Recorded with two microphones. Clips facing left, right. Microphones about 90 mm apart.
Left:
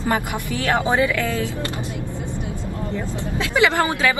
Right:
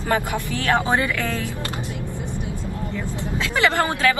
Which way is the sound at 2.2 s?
20° right (ahead or behind).